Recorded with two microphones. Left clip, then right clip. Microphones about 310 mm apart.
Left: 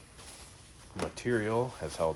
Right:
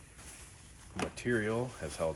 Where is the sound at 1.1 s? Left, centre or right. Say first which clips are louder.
Left 3 dB; left.